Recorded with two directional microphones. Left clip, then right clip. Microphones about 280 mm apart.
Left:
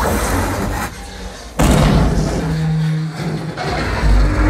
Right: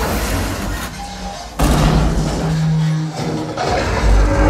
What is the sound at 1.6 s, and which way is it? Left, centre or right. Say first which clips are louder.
Thump: left 2 dB; left.